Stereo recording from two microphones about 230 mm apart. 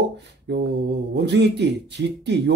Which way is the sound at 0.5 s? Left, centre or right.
Right.